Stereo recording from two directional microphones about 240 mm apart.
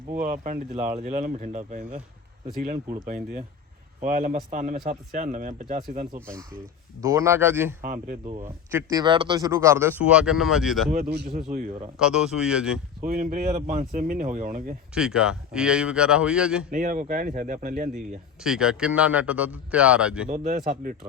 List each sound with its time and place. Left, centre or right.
0.1 s speech: right
7.0 s speech: centre
8.0 s speech: right
8.7 s speech: centre
11.5 s a man's voice: right
11.9 s speech: centre
13.0 s a man's voice: right
14.9 s speech: centre
16.7 s speech: right
18.4 s speech: centre
20.3 s a man's voice: right